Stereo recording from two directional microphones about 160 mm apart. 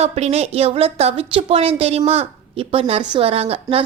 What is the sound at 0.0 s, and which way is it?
A woman's voice, 40° right (ahead or behind).